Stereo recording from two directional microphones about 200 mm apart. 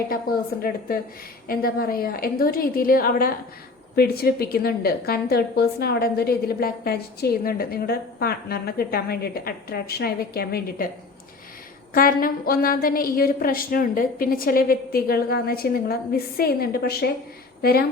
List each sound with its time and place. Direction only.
0.3 s a woman's voice: 50° left (ahead or behind)
1.5 s a woman's voice: 45° left (ahead or behind)
11.9 s a woman's voice: 45° left (ahead or behind)